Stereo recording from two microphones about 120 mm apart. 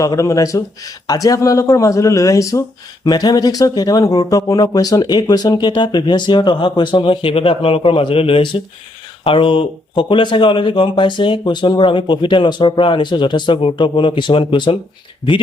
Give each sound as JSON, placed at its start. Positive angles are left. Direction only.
{"t": 0.0, "sound": "speech", "side_deg": 30}